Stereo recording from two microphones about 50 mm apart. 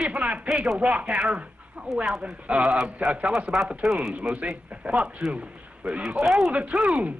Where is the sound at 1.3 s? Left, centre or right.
Right.